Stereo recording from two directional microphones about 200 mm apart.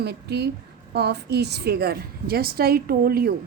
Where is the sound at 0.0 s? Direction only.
55° right (ahead or behind).